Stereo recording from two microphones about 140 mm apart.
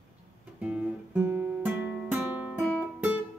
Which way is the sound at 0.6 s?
10° right (ahead or behind).